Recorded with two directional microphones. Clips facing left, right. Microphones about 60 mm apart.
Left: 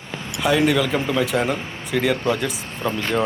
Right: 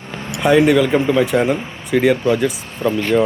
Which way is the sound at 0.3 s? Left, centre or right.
Right.